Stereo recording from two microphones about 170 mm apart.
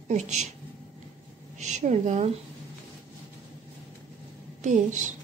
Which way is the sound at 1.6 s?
45° right (ahead or behind).